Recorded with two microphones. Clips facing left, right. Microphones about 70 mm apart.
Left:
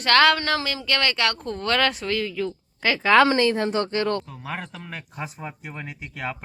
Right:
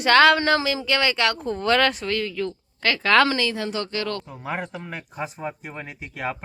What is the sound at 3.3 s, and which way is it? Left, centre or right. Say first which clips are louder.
Speech: left 4 dB; left.